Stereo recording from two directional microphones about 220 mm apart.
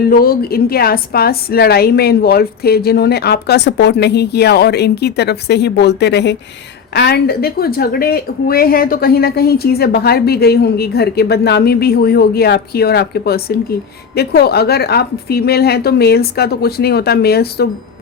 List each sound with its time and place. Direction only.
0.1 s speech: 40° left (ahead or behind)